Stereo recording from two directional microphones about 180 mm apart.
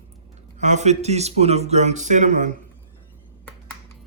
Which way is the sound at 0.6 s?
40° right (ahead or behind).